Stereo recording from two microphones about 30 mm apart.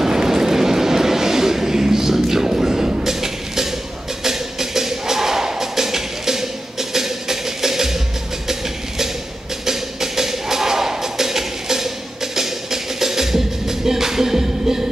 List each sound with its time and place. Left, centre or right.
0.0 s vehicle: centre
4.2 s music: centre